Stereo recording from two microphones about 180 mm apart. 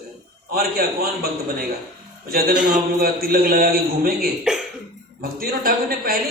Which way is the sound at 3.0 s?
55° right (ahead or behind).